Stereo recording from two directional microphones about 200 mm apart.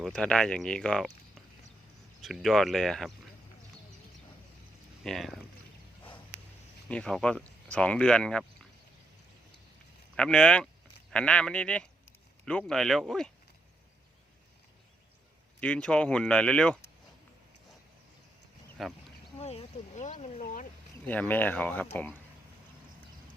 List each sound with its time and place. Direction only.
0.0 s speech: 5° left (ahead or behind)
2.2 s speech: centre (ahead or behind)
5.0 s speech: centre (ahead or behind)
6.8 s speech: 5° left (ahead or behind)
10.2 s speech: 5° left (ahead or behind)
15.6 s speech: 5° left (ahead or behind)
18.8 s speech: centre (ahead or behind)
19.4 s a sound: 30° left (ahead or behind)
21.1 s speech: 10° left (ahead or behind)